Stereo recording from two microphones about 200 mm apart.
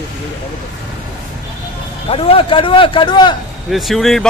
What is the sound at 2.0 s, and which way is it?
A man's voice, 30° left (ahead or behind).